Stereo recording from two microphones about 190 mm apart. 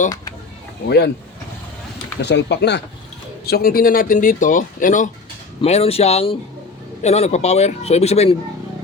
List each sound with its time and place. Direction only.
0.9 s speech: 60° left (ahead or behind)
2.2 s speech: 65° left (ahead or behind)
3.4 s a man's voice: 50° left (ahead or behind); by 8.4 s 35° left (ahead or behind)